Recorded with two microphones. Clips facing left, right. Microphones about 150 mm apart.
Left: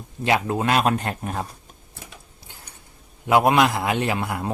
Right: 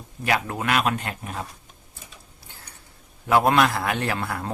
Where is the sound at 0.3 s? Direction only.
20° left (ahead or behind); by 1.5 s 45° left (ahead or behind).